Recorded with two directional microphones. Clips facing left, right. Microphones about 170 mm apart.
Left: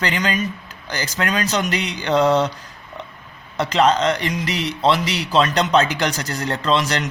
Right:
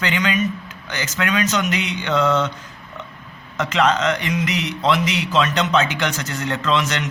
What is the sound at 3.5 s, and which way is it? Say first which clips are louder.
A man's voice: left 2 dB; 35° left (ahead or behind).